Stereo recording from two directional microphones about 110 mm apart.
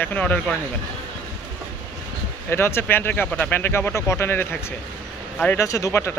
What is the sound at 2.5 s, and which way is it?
Speech, 20° left (ahead or behind).